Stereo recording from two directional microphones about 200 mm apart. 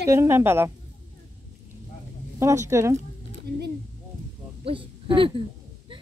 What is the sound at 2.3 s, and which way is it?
Speech, 15° right (ahead or behind).